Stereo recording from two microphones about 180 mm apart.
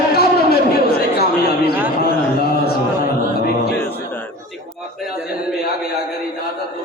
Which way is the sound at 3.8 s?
10° left (ahead or behind).